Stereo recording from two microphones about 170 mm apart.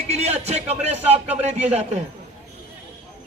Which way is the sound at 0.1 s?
40° right (ahead or behind).